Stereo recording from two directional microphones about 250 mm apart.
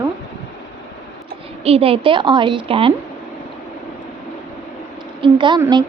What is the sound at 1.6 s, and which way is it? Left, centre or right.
A woman's voice, right.